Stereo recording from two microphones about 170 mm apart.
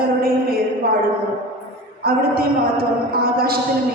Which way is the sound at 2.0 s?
60° right (ahead or behind).